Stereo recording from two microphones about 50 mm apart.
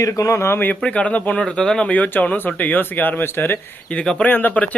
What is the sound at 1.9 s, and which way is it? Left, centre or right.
Speech, left.